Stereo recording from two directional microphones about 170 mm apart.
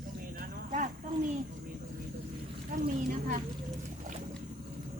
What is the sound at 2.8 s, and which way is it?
Speech, 50° right (ahead or behind).